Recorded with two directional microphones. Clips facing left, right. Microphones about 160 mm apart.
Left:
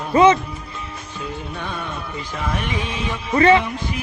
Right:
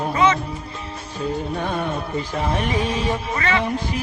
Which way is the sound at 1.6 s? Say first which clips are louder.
Right 5 dB; 45° right (ahead or behind).